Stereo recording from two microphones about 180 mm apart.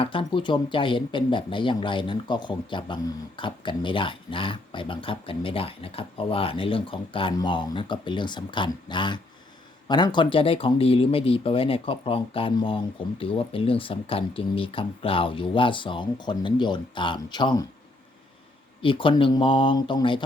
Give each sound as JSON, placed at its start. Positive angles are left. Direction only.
{"t": 0.0, "sound": "speech", "side_deg": 30}
{"t": 18.8, "sound": "speech", "side_deg": 30}